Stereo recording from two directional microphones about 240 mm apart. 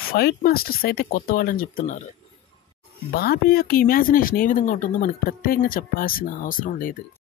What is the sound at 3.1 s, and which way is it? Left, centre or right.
Speech, left.